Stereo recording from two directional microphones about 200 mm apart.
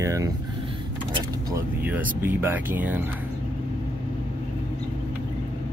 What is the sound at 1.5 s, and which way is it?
Speech, 10° right (ahead or behind).